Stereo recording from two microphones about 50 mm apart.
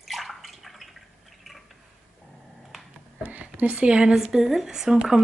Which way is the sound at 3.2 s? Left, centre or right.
Right.